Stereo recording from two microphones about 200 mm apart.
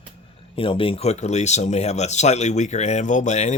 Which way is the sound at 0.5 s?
25° left (ahead or behind).